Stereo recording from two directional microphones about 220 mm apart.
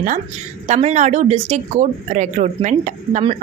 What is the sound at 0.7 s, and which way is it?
Speech, 30° right (ahead or behind).